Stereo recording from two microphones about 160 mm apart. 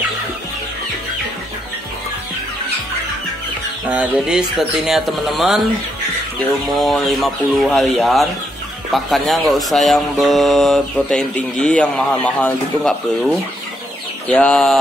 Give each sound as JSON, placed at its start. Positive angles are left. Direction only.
{"t": 3.8, "sound": "speech", "side_deg": -10}
{"t": 6.8, "sound": "speech", "side_deg": 0}